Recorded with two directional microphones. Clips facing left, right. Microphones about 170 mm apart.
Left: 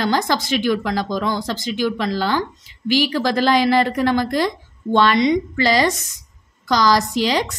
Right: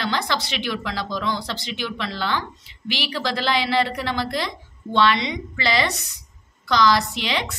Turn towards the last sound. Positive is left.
turn(degrees=40)  # may be behind; listen again after turning